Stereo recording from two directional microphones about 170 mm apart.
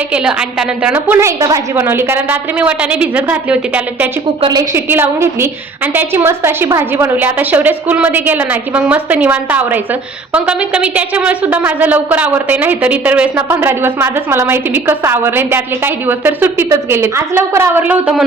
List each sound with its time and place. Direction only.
0.1 s speech: 5° right (ahead or behind)
4.4 s a woman's voice: 25° right (ahead or behind)
4.7 s speech: 15° right (ahead or behind)